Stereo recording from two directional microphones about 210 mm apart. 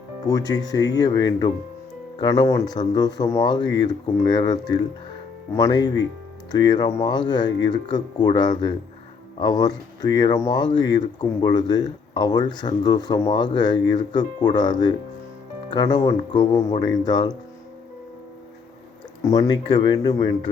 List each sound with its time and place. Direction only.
0.3 s speech: 15° left (ahead or behind)
19.2 s speech: 15° left (ahead or behind)